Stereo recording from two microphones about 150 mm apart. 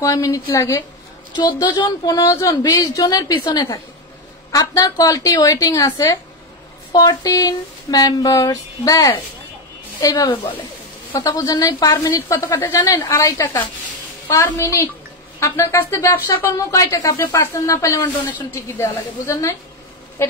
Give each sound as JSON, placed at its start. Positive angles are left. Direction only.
{"t": 0.0, "sound": "speech", "side_deg": 20}
{"t": 10.2, "sound": "speech", "side_deg": 35}
{"t": 11.1, "sound": "speech", "side_deg": 20}
{"t": 20.2, "sound": "a sound", "side_deg": 20}